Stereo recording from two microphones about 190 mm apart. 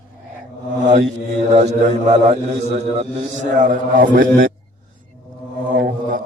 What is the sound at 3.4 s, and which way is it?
A man's voice, 45° right (ahead or behind).